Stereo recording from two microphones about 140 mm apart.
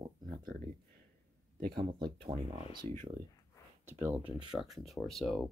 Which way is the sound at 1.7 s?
35° right (ahead or behind).